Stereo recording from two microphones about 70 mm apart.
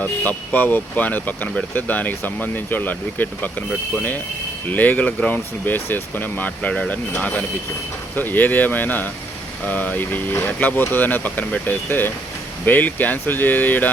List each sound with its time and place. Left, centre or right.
0.0 s speech: left
4.7 s speech: left